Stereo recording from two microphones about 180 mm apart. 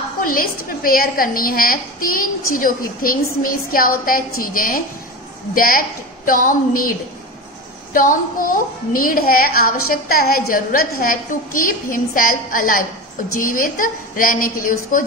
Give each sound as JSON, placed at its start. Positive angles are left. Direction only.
{"t": 0.2, "sound": "a woman's voice", "side_deg": 50}